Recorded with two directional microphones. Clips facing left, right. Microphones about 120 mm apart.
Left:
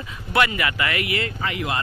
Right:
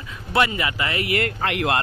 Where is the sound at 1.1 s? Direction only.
55° right (ahead or behind); by 1.8 s 75° right (ahead or behind).